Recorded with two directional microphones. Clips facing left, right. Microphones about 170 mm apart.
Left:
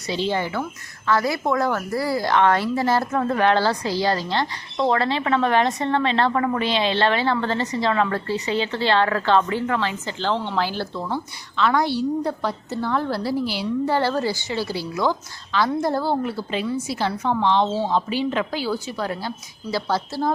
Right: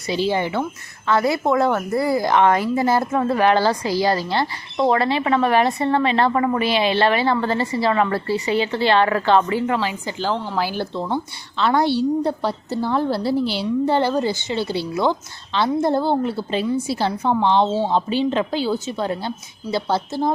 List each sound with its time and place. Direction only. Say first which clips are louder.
0.1 s a woman's voice: right 3 dB; 10° right (ahead or behind)
10.9 s a woman's voice: right 3 dB; 25° right (ahead or behind)